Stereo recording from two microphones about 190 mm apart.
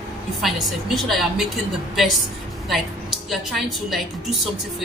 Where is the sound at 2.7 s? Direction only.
Centre (ahead or behind).